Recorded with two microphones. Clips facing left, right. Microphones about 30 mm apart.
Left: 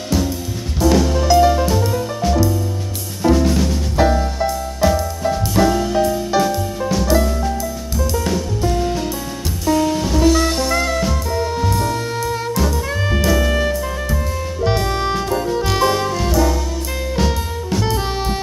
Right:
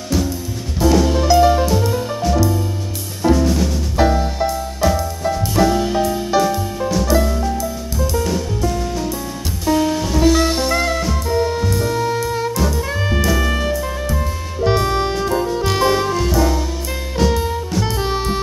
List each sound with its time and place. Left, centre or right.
0.8 s music: right
1.2 s music: centre
3.9 s music: centre
9.7 s music: centre
10.7 s drum kit: centre
11.0 s music: centre